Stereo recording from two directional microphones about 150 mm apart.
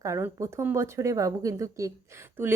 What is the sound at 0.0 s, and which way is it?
Speech, 20° right (ahead or behind).